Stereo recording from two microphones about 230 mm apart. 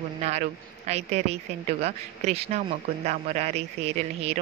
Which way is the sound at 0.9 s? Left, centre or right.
Right.